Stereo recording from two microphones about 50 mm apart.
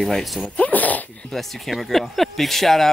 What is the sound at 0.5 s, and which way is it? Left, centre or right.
Speech, left.